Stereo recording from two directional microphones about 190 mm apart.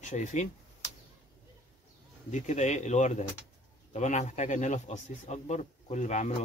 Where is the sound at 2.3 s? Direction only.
40° left (ahead or behind).